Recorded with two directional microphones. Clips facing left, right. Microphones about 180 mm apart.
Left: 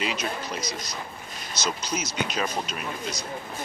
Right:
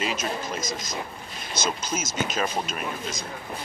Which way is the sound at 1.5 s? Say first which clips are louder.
Right 1 dB; 50° right (ahead or behind).